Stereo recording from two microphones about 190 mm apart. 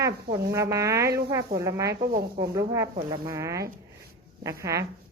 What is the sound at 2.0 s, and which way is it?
Speech, 50° right (ahead or behind).